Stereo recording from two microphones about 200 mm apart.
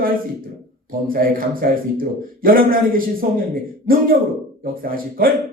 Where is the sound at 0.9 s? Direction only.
45° right (ahead or behind).